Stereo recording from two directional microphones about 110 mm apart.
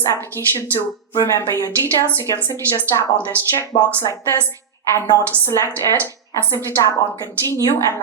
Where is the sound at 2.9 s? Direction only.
35° left (ahead or behind).